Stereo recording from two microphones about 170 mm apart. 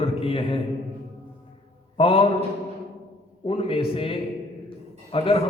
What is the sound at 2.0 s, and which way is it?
Speech, 35° left (ahead or behind).